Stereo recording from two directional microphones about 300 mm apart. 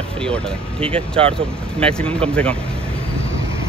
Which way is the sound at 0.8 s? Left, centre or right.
Centre.